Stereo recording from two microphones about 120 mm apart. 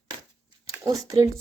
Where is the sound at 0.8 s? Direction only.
30° right (ahead or behind).